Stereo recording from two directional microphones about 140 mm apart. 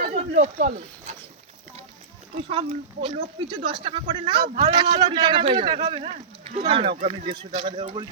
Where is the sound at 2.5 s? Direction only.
45° right (ahead or behind).